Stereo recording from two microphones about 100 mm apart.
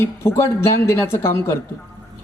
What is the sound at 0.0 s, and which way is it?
Speech, 25° left (ahead or behind).